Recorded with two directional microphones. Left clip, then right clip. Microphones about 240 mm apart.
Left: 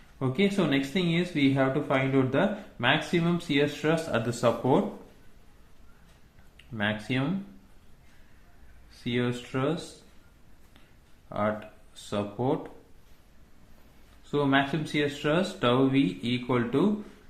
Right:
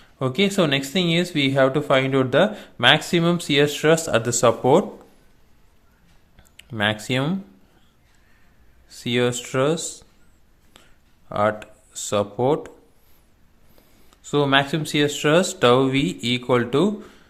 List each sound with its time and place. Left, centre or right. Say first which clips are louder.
0.2 s speech: right 7 dB; right
6.7 s speech: right 8 dB; right
9.0 s speech: right 9 dB; right
11.3 s speech: right 8 dB; right
14.3 s speech: right 7 dB; right